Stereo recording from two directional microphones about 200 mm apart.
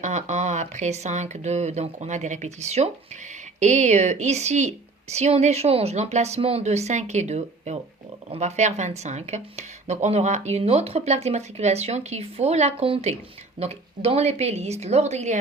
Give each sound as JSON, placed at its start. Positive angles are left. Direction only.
{"t": 0.0, "sound": "speech", "side_deg": -35}